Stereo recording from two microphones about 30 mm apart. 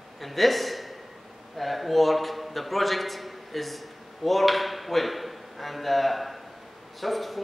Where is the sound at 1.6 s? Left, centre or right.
Centre.